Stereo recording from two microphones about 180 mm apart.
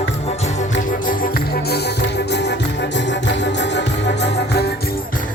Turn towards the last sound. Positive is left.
turn(degrees=75)  # may be behind; listen again after turning